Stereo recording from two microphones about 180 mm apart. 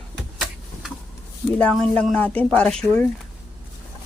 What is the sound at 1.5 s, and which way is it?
Speech, 5° left (ahead or behind).